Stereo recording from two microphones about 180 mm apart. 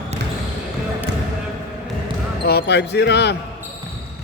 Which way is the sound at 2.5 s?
65° left (ahead or behind).